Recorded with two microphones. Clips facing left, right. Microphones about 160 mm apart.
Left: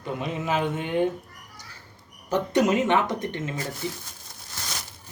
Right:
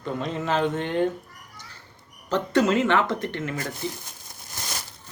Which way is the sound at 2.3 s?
15° left (ahead or behind).